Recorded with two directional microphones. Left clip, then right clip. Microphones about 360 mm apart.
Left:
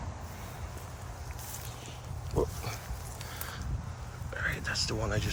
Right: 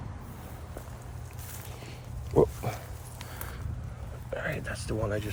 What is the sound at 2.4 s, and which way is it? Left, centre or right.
Pig, centre.